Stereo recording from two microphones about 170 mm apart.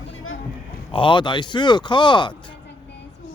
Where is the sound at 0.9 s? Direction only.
30° left (ahead or behind).